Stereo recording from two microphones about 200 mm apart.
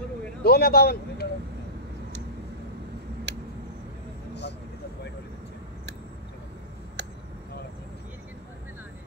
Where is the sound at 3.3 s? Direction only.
60° right (ahead or behind).